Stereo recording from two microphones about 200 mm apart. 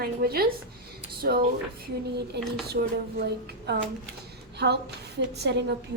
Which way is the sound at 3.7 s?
55° right (ahead or behind).